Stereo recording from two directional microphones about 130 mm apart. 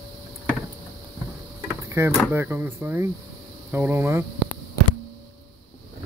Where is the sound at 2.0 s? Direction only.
20° right (ahead or behind).